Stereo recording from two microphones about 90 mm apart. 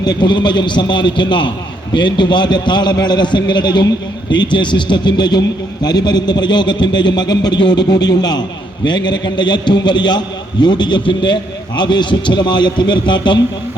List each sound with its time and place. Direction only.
0.0 s a man's voice: 55° left (ahead or behind)